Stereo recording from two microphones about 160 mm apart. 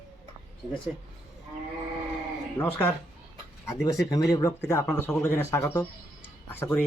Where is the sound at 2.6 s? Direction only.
10° left (ahead or behind).